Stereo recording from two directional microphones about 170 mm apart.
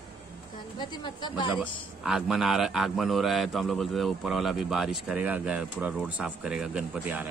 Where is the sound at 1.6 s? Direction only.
Centre (ahead or behind).